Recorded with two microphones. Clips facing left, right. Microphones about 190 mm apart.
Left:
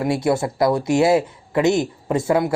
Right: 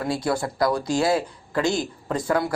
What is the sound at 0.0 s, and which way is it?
Speech, 25° left (ahead or behind).